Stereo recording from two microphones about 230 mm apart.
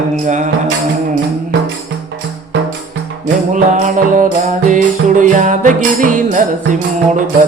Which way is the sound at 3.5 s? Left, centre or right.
Right.